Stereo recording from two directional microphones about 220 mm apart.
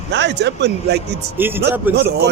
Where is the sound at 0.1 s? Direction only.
50° right (ahead or behind).